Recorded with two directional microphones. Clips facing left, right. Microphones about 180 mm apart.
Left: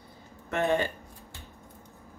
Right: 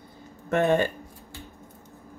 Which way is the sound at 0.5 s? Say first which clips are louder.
Right 5 dB; 50° right (ahead or behind).